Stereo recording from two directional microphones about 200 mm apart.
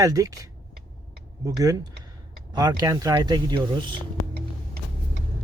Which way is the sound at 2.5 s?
20° right (ahead or behind).